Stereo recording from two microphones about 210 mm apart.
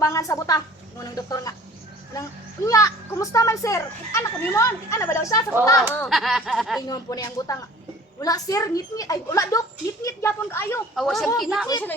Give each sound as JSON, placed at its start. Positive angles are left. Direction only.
{"t": 0.0, "sound": "a woman's voice", "side_deg": 15}
{"t": 2.6, "sound": "speech", "side_deg": 15}
{"t": 5.9, "sound": "speech", "side_deg": 5}
{"t": 6.8, "sound": "speech", "side_deg": 20}
{"t": 10.9, "sound": "speech", "side_deg": 0}